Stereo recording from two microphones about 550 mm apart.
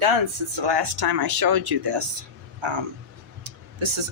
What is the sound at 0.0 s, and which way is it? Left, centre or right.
Speech, right.